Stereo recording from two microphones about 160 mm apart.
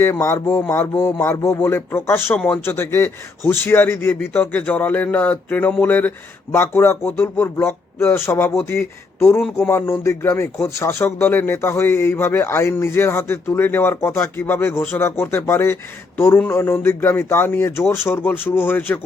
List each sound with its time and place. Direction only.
0.0 s speech: 15° left (ahead or behind)